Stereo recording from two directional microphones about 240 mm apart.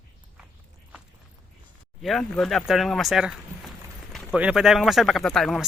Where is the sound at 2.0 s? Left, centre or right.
Centre.